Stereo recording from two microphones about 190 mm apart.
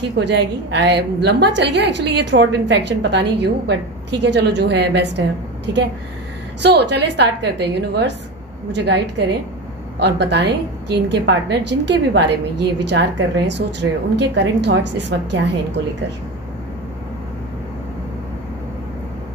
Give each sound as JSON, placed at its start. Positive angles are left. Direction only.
{"t": 0.0, "sound": "a woman's voice", "side_deg": -65}
{"t": 6.6, "sound": "a woman's voice", "side_deg": -60}